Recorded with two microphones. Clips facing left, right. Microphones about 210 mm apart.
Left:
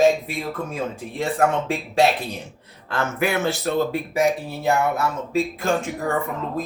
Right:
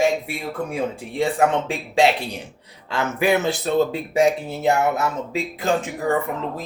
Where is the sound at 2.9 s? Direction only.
15° right (ahead or behind).